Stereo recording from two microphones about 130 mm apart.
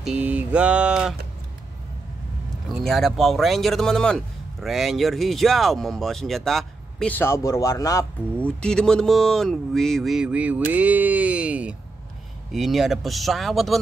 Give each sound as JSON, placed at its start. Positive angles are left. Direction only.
{"t": 0.0, "sound": "a sound", "side_deg": -10}
{"t": 2.8, "sound": "speech", "side_deg": 5}
{"t": 7.2, "sound": "a man's voice", "side_deg": 20}
{"t": 8.4, "sound": "speech", "side_deg": 10}
{"t": 10.7, "sound": "a sound", "side_deg": -10}
{"t": 12.5, "sound": "speech", "side_deg": 0}